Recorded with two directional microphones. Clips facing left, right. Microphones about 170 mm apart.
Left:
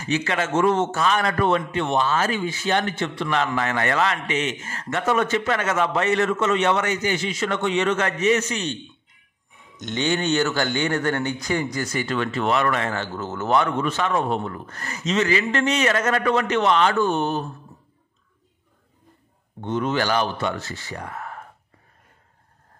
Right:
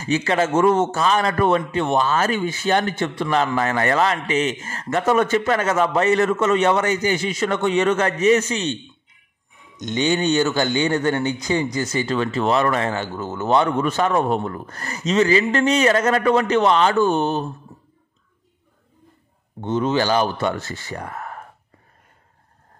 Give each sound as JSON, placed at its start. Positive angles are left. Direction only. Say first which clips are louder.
{"t": 0.0, "sound": "a man's voice", "louder": "right 4 dB", "side_deg": -35}
{"t": 9.8, "sound": "speech", "louder": "right 3 dB", "side_deg": -15}
{"t": 12.9, "sound": "speech", "louder": "right 2 dB", "side_deg": -15}
{"t": 13.6, "sound": "a man's voice", "louder": "right 4 dB", "side_deg": -35}
{"t": 19.7, "sound": "speech", "louder": "right 3 dB", "side_deg": -30}
{"t": 20.3, "sound": "speech", "louder": "right 3 dB", "side_deg": -45}